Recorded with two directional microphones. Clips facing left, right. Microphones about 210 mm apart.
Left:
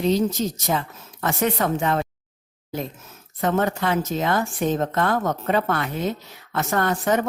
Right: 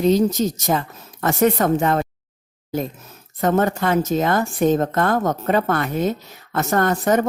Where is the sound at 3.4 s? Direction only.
45° right (ahead or behind).